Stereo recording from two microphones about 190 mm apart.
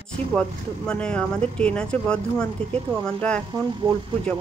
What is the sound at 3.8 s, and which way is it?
Speech, 25° right (ahead or behind).